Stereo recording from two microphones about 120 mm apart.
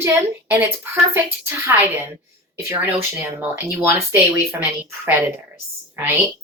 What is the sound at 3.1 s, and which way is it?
Speech, 15° right (ahead or behind).